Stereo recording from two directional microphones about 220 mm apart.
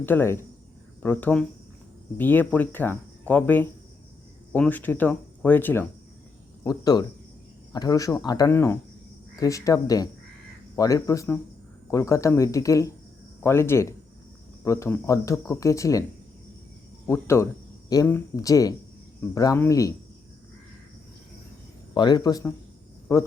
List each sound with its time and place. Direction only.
0.0 s speech: 10° left (ahead or behind)
17.1 s speech: 10° left (ahead or behind)
21.9 s speech: 20° left (ahead or behind)